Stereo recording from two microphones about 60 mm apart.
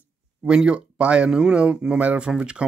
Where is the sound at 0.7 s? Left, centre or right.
Centre.